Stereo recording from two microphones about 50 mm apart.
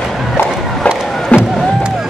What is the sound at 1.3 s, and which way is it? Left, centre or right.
Music, left.